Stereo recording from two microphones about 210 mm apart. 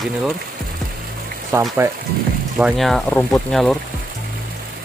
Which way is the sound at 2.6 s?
Centre (ahead or behind).